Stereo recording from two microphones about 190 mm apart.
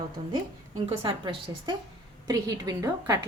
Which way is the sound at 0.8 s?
25° right (ahead or behind).